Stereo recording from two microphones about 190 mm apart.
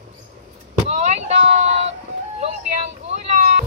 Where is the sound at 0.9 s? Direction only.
35° right (ahead or behind).